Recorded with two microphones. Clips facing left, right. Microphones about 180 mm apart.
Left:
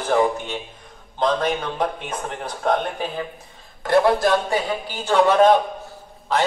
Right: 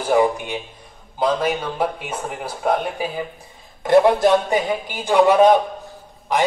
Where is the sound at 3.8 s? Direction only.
20° right (ahead or behind).